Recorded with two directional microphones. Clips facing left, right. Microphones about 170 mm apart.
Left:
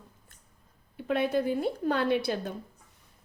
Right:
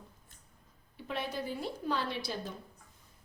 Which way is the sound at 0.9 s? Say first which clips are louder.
Left 10 dB; 55° left (ahead or behind).